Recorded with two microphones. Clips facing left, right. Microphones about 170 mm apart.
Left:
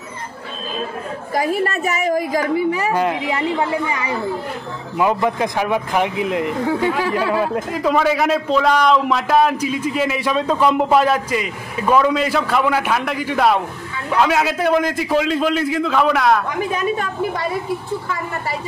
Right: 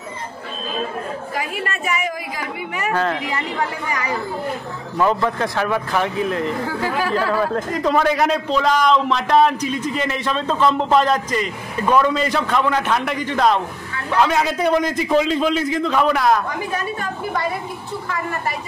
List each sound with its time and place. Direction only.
1.3 s a woman's voice: 40° left (ahead or behind)
2.9 s speech: 15° left (ahead or behind)
4.9 s speech: 15° left (ahead or behind)
7.5 s a man's voice: 5° left (ahead or behind)